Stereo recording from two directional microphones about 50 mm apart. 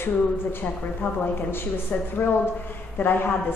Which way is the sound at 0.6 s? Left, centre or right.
Left.